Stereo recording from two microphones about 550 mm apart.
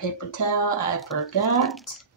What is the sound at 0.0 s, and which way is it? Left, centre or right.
A woman's voice, left.